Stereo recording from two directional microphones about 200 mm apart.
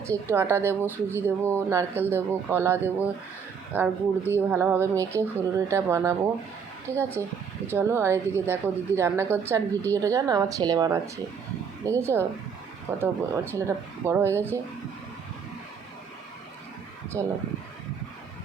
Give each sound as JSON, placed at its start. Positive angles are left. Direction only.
{"t": 0.1, "sound": "speech", "side_deg": -15}
{"t": 17.1, "sound": "speech", "side_deg": -20}